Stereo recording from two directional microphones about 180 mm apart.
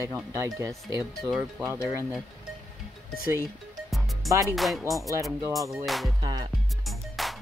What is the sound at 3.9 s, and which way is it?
Music, centre (ahead or behind).